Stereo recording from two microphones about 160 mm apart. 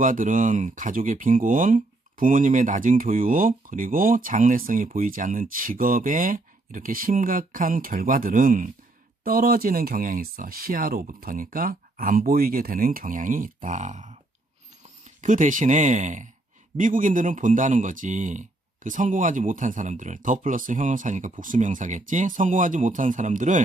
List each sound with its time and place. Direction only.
0.0 s speech: 55° right (ahead or behind)